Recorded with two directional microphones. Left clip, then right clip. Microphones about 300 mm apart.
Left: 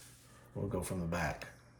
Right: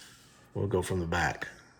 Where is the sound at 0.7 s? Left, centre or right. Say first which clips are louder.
Right 9 dB; right.